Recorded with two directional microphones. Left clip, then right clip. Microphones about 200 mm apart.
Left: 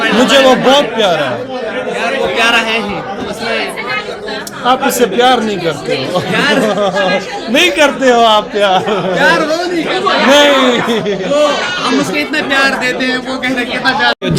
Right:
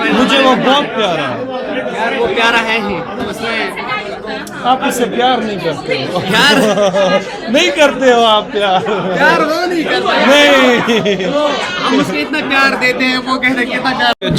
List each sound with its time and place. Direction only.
0.0 s a man's voice: 15° left (ahead or behind)
4.6 s a man's voice: 15° left (ahead or behind)
6.3 s speech: 40° right (ahead or behind)
6.7 s speech: 10° right (ahead or behind)
7.5 s a man's voice: 5° left (ahead or behind)
9.1 s a man's voice: centre (ahead or behind)
12.1 s a man's voice: 5° left (ahead or behind)